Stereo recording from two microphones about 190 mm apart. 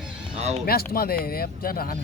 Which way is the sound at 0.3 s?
35° right (ahead or behind).